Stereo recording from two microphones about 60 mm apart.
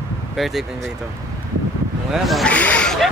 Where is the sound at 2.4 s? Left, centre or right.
Left.